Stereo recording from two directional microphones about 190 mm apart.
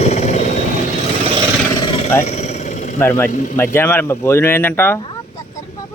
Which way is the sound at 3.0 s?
15° left (ahead or behind).